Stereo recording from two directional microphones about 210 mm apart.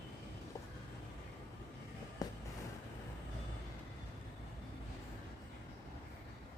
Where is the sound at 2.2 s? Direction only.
15° left (ahead or behind).